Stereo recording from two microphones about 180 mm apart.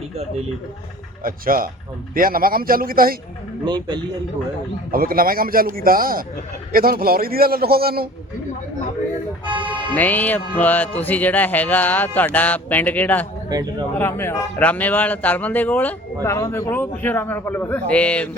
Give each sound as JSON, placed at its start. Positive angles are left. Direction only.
{"t": 1.2, "sound": "a man's voice", "side_deg": -50}
{"t": 3.7, "sound": "speech", "side_deg": -25}
{"t": 4.9, "sound": "a man's voice", "side_deg": -55}
{"t": 9.9, "sound": "speech", "side_deg": 10}
{"t": 13.5, "sound": "speech", "side_deg": -20}
{"t": 14.0, "sound": "speech", "side_deg": 15}